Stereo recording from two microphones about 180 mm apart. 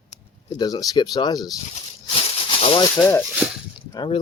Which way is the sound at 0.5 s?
20° left (ahead or behind).